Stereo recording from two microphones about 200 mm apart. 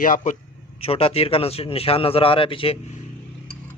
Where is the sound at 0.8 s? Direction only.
30° left (ahead or behind).